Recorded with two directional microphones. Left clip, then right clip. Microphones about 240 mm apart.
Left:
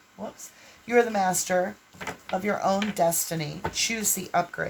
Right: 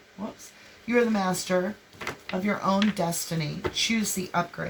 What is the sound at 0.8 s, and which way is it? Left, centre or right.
Speech, left.